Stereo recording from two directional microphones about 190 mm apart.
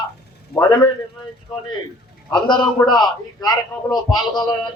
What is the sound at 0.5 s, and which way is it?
Speech, 20° left (ahead or behind).